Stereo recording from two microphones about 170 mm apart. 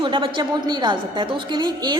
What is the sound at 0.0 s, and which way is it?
A woman's voice, 30° right (ahead or behind).